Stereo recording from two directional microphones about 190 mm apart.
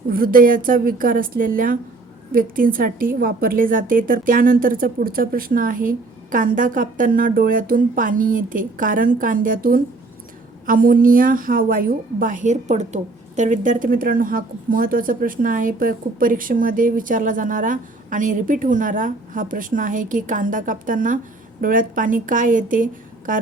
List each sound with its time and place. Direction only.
0.1 s a woman's voice: 50° right (ahead or behind)